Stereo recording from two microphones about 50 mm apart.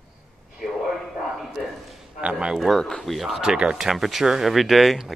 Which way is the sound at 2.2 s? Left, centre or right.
Centre.